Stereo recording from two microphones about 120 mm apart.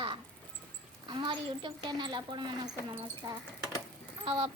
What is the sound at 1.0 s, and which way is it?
Speech, 40° right (ahead or behind).